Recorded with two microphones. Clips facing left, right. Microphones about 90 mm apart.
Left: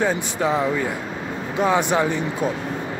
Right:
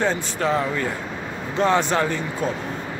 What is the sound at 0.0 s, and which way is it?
A man's voice, 10° left (ahead or behind).